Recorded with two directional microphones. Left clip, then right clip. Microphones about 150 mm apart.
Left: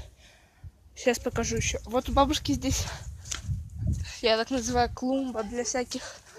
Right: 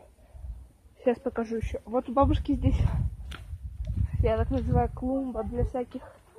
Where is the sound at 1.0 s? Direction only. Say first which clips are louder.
Left 1 dB; 10° left (ahead or behind).